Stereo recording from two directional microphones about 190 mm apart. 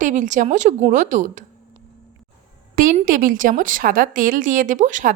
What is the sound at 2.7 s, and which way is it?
Speech, 45° right (ahead or behind).